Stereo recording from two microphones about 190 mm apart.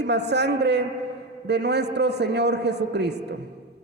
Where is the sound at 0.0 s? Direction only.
60° right (ahead or behind).